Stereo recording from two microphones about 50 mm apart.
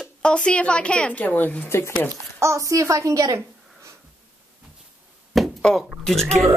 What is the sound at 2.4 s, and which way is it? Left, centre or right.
Speech, right.